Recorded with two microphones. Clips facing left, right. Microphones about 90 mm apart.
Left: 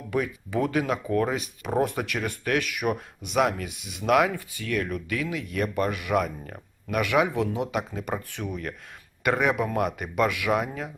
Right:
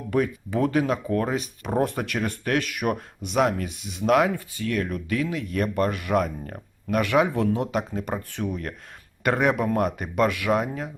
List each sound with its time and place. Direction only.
0.1 s speech: 35° right (ahead or behind)
8.4 s speech: 15° right (ahead or behind)
9.2 s speech: 35° right (ahead or behind)